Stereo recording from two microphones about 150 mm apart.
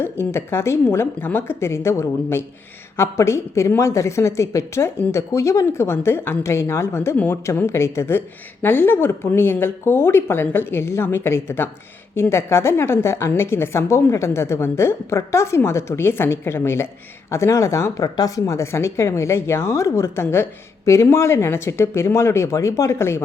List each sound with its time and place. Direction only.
0.0 s speech: 15° left (ahead or behind)